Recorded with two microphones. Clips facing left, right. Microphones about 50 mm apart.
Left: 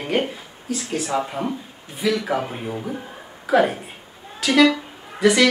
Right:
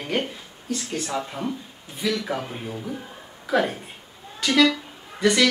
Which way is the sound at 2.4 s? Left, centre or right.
Centre.